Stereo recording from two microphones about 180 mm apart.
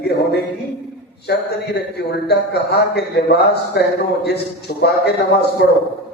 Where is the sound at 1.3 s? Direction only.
70° left (ahead or behind).